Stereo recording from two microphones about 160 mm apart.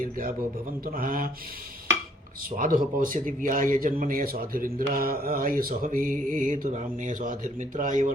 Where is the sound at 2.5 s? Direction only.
60° right (ahead or behind).